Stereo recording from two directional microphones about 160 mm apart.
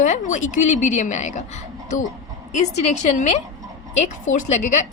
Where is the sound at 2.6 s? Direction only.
45° left (ahead or behind).